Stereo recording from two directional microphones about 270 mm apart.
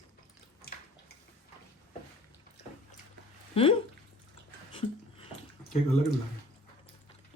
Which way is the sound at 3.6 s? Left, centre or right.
Left.